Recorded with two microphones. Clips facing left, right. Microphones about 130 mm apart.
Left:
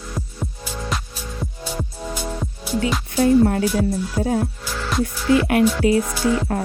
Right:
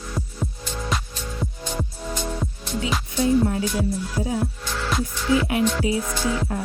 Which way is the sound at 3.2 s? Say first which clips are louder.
Left 5 dB; 65° left (ahead or behind).